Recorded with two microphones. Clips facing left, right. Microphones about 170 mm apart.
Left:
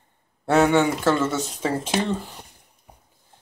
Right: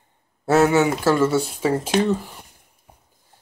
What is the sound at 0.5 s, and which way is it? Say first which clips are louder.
Speech: right 2 dB; 5° right (ahead or behind).